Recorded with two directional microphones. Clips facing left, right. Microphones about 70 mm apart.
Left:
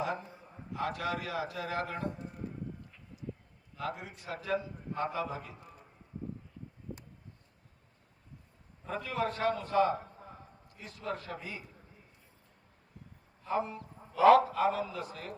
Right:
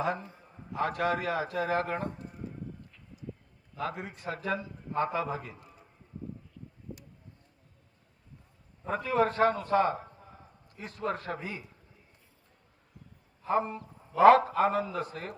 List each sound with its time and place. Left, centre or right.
0.8 s a man's voice: right
3.8 s a man's voice: right
8.9 s a man's voice: right
13.5 s a man's voice: right